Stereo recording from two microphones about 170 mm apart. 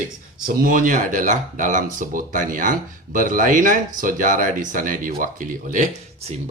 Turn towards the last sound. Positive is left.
turn(degrees=-45)  # may be behind; listen again after turning